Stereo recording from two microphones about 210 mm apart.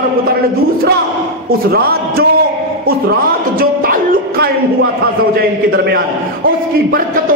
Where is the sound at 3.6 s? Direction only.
45° right (ahead or behind).